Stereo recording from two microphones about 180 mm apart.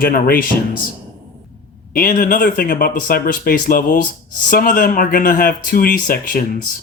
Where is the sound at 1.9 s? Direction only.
50° left (ahead or behind).